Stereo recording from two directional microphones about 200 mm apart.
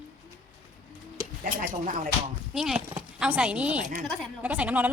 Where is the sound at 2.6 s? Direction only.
Centre (ahead or behind).